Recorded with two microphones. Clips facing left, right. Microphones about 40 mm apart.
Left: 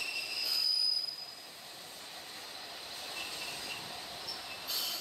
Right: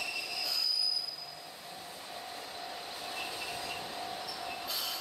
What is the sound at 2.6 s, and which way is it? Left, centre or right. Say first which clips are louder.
Train: right 4 dB; centre.